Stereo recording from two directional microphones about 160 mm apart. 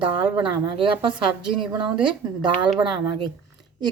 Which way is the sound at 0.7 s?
30° right (ahead or behind).